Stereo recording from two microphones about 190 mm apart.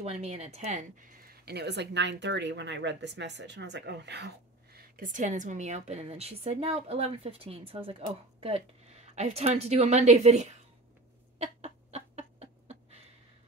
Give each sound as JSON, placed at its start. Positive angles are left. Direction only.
{"t": 0.0, "sound": "speech", "side_deg": -35}
{"t": 4.7, "sound": "a woman's voice", "side_deg": -45}
{"t": 11.3, "sound": "bird", "side_deg": -35}